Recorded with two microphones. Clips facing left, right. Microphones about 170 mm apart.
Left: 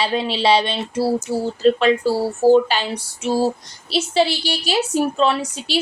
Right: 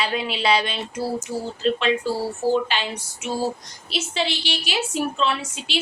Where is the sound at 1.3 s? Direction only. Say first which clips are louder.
Left 6 dB; 70° left (ahead or behind).